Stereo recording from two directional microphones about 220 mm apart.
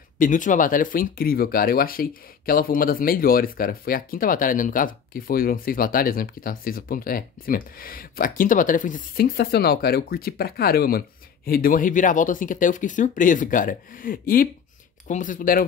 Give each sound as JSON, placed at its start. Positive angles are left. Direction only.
{"t": 0.2, "sound": "speech", "side_deg": 35}